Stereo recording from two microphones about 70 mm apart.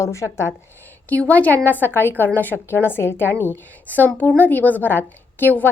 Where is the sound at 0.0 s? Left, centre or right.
Left.